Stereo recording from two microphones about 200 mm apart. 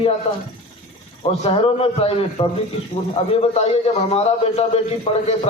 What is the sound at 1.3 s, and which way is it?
A man's voice, 30° left (ahead or behind).